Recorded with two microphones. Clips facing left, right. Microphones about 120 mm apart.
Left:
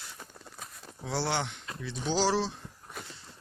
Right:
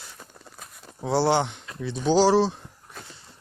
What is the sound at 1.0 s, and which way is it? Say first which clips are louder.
Speech: right 10 dB; 30° right (ahead or behind).